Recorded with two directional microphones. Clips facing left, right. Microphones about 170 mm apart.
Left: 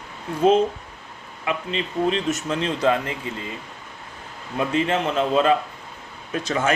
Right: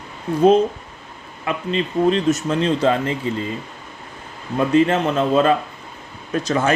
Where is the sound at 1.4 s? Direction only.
40° right (ahead or behind).